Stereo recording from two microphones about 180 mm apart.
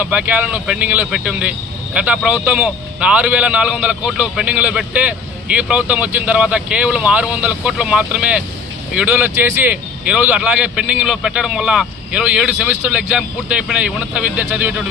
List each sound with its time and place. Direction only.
0.0 s speech: 10° right (ahead or behind)